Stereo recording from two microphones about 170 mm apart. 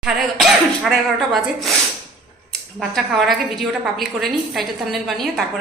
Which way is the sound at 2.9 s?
Centre (ahead or behind).